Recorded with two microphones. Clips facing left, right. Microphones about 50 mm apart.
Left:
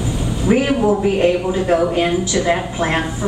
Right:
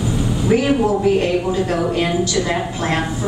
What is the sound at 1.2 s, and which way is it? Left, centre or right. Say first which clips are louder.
Speech: left 2 dB; centre.